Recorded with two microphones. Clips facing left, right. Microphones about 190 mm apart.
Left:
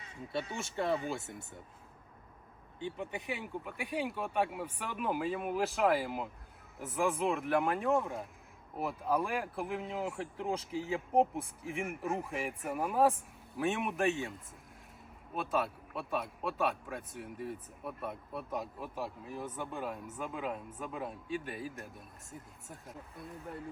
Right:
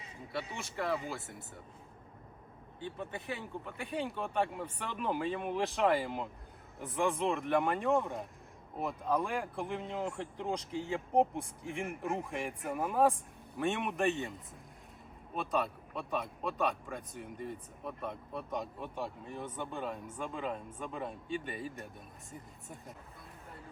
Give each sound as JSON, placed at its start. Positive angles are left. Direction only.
{"t": 0.8, "sound": "speech", "side_deg": 25}
{"t": 2.8, "sound": "a man's voice", "side_deg": 15}
{"t": 15.4, "sound": "a man's voice", "side_deg": 0}